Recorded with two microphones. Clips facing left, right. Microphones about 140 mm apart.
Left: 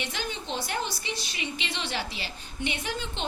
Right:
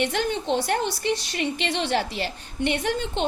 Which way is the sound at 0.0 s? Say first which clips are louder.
Right 10 dB; 60° right (ahead or behind).